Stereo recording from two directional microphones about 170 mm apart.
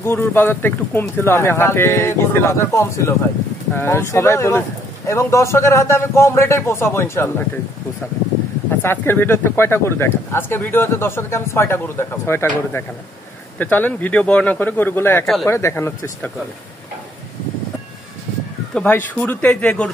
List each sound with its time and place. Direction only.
0.0 s speech: 15° left (ahead or behind)
8.8 s speech: 15° left (ahead or behind)
18.8 s speech: 10° left (ahead or behind)